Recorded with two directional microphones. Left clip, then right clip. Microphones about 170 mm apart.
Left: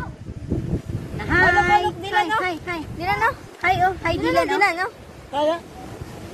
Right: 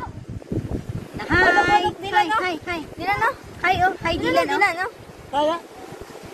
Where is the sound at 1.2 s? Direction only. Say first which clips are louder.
Even; 30° right (ahead or behind).